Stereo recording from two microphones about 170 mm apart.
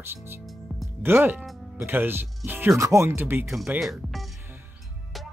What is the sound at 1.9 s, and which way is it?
Speech, 10° right (ahead or behind).